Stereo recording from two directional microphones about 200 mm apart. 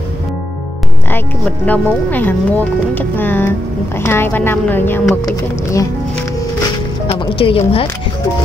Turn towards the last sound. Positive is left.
turn(degrees=25)  # may be behind; listen again after turning